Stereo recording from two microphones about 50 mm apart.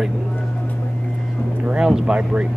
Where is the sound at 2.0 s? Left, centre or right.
Right.